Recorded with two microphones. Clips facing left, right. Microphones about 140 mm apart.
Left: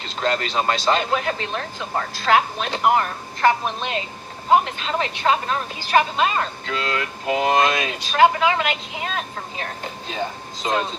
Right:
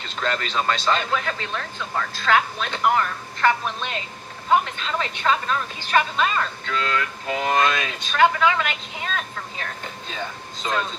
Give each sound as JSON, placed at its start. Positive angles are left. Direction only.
{"t": 0.0, "sound": "a woman's voice", "side_deg": 35}